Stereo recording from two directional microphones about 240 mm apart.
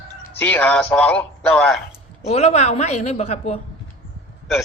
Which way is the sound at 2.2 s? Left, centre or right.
Left.